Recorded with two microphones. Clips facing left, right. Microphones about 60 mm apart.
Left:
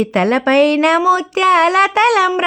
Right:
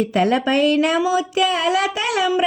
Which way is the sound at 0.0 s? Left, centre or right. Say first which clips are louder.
Left 3 dB; left.